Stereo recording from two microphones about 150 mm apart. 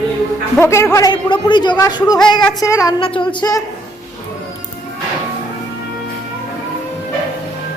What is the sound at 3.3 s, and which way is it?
Speech, 25° left (ahead or behind).